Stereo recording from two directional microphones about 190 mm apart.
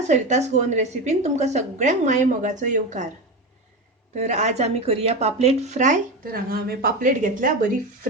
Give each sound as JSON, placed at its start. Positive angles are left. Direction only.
{"t": 0.1, "sound": "speech", "side_deg": -40}
{"t": 4.1, "sound": "speech", "side_deg": -40}